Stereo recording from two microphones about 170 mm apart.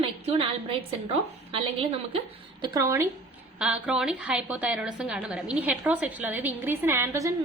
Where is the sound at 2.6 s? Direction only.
25° right (ahead or behind).